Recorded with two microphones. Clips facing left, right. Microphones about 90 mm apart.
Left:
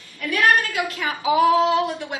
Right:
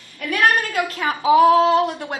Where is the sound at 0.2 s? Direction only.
45° right (ahead or behind).